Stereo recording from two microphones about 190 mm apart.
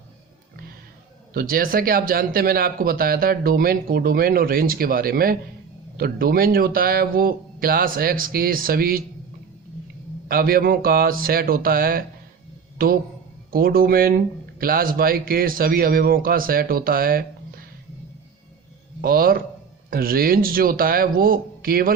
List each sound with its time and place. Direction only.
1.3 s speech: 50° right (ahead or behind)
10.2 s speech: 50° right (ahead or behind)
13.5 s speech: 50° right (ahead or behind)
19.0 s speech: 50° right (ahead or behind)